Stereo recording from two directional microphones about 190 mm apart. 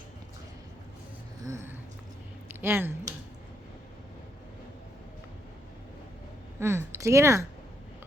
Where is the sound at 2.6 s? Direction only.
10° right (ahead or behind).